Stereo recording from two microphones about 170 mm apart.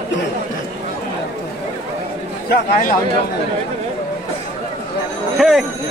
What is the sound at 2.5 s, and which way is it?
Speech, 60° left (ahead or behind).